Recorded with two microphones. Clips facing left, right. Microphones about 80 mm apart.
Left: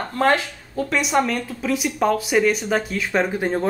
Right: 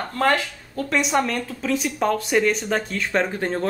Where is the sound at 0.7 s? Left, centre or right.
Centre.